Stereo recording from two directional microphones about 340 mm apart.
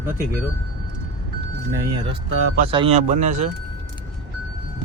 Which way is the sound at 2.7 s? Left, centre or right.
Centre.